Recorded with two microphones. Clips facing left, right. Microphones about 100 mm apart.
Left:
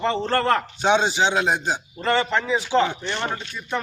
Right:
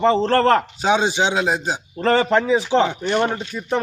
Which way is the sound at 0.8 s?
10° right (ahead or behind).